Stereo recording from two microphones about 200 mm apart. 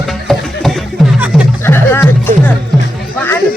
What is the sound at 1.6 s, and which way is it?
Music, 10° left (ahead or behind).